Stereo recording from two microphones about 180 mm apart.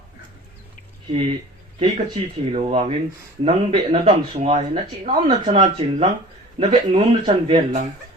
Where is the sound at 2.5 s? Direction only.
35° right (ahead or behind).